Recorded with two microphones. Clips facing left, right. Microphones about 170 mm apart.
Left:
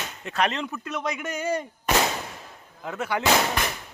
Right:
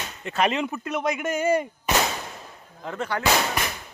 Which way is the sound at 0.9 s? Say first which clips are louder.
Right 4 dB; 50° right (ahead or behind).